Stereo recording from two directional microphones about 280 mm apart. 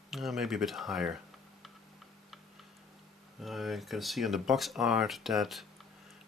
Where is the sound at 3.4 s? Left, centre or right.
Centre.